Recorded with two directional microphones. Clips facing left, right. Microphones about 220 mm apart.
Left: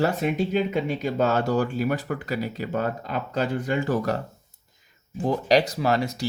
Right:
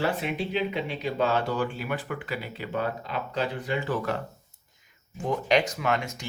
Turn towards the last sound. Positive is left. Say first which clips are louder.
# left 5 dB
turn(degrees=35)  # may be behind; listen again after turning